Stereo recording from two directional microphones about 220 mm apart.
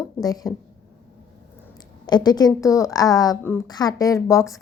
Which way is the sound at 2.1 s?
20° left (ahead or behind).